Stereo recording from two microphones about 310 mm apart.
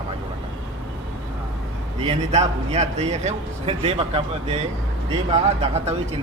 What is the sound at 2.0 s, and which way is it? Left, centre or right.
A man's voice, centre.